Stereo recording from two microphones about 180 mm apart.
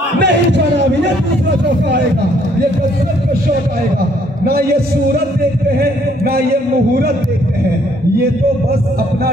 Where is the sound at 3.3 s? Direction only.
55° right (ahead or behind).